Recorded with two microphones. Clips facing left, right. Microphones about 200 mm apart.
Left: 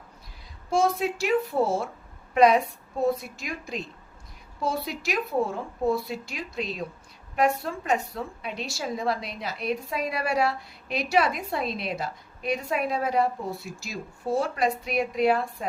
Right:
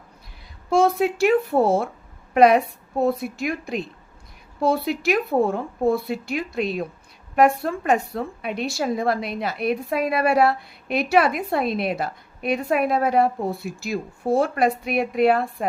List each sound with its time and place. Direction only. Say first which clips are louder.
0.7 s a woman's voice: right 5 dB; 60° right (ahead or behind)